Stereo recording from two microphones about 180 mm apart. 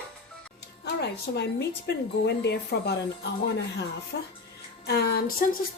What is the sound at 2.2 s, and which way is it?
Speech, 70° left (ahead or behind).